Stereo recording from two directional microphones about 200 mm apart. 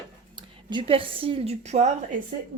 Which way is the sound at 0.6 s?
25° right (ahead or behind).